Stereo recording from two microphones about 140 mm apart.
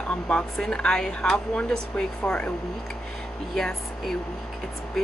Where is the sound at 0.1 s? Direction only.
5° left (ahead or behind).